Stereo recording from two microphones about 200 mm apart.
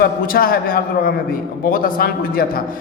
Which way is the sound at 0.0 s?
45° left (ahead or behind).